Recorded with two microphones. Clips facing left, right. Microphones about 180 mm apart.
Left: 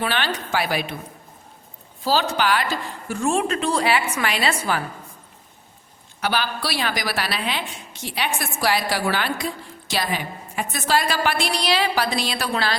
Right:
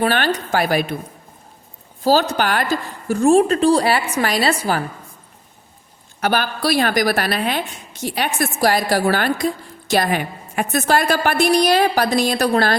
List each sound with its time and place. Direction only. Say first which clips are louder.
0.0 s a woman's voice: right 6 dB; 45° right (ahead or behind)
2.0 s a woman's voice: right 4 dB; 45° right (ahead or behind)
6.1 s a woman's voice: right 4 dB; 50° right (ahead or behind)
9.9 s a woman's voice: right 7 dB; 55° right (ahead or behind)